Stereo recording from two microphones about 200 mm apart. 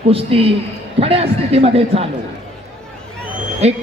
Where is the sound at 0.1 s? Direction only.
30° right (ahead or behind).